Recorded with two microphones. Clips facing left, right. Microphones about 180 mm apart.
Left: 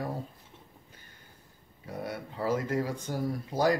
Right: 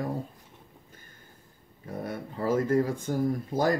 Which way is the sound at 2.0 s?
50° right (ahead or behind).